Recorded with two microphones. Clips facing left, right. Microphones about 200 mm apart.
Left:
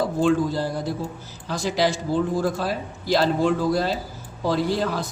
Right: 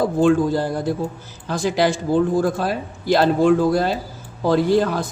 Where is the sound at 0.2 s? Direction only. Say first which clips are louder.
Right 4 dB; 50° right (ahead or behind).